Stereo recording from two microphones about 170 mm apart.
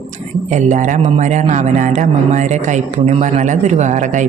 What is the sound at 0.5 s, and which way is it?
Speech, 45° right (ahead or behind).